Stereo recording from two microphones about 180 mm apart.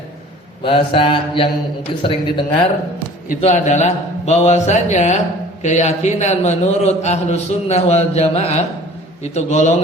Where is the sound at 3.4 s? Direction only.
40° left (ahead or behind).